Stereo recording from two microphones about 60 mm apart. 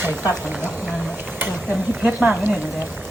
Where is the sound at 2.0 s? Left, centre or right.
Centre.